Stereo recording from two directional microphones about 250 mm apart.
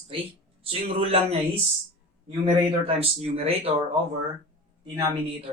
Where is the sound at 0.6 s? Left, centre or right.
Right.